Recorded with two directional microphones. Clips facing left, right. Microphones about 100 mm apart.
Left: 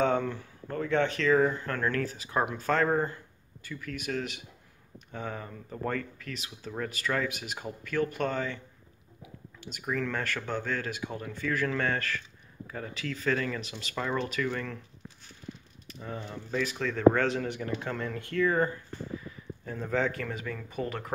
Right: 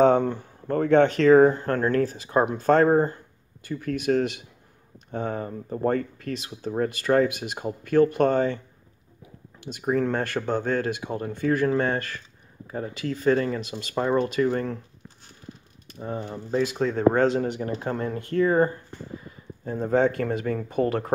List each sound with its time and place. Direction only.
0.0 s speech: 40° right (ahead or behind)
9.8 s speech: 35° right (ahead or behind)
16.0 s speech: 35° right (ahead or behind)